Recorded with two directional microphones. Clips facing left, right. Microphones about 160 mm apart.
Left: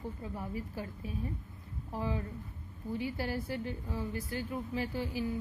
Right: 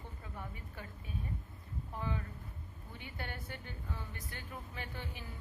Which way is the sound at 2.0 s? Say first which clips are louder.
Left 5 dB; 30° left (ahead or behind).